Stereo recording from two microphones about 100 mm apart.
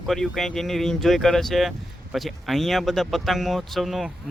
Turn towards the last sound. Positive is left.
turn(degrees=0)  # may be behind; listen again after turning